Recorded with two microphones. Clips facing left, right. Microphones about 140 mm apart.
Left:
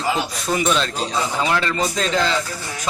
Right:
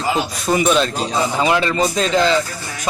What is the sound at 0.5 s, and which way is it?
A man's voice, 10° right (ahead or behind).